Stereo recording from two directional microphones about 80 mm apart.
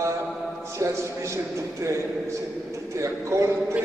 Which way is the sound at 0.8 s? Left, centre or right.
Right.